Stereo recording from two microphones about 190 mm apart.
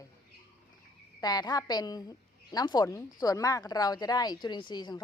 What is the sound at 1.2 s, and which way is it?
A woman's voice, 20° left (ahead or behind).